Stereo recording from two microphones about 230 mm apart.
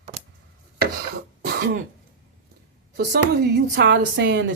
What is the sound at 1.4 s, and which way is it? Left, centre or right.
Throat clearing, right.